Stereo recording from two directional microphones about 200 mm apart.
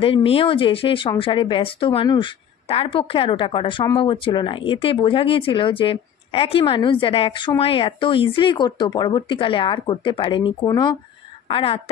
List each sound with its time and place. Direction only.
0.0 s speech: 25° left (ahead or behind)